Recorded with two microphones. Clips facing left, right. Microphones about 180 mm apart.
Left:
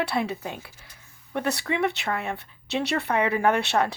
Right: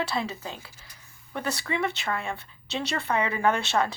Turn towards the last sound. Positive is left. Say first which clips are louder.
# left 2 dB
turn(degrees=65)  # may be behind; listen again after turning